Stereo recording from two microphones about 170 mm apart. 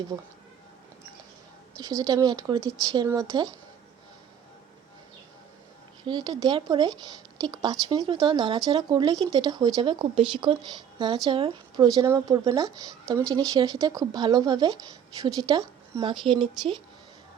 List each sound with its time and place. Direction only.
0.1 s speech: 25° right (ahead or behind)
1.8 s speech: 20° right (ahead or behind)
6.1 s speech: 25° right (ahead or behind)